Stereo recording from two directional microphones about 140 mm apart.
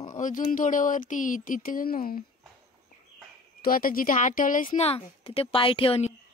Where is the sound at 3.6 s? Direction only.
90° left; by 4.6 s 75° left (ahead or behind).